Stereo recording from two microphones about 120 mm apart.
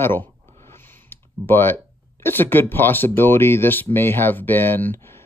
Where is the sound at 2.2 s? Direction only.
20° left (ahead or behind).